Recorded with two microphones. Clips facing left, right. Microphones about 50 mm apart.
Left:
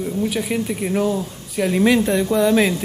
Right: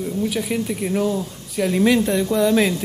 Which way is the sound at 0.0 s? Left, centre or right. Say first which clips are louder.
Left 1 dB; centre.